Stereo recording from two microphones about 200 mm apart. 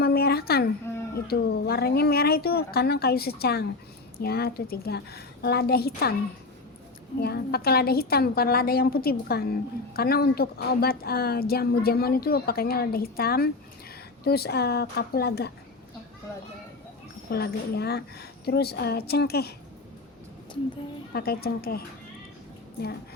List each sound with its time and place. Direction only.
0.0 s a sound: 50° left (ahead or behind)
1.3 s a woman's voice: 55° left (ahead or behind)
7.2 s a woman's voice: 50° left (ahead or behind)
17.3 s a woman's voice: 55° left (ahead or behind)
21.1 s a woman's voice: 50° left (ahead or behind)